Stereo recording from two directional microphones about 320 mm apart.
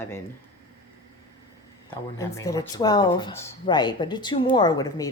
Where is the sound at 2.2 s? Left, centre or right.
Centre.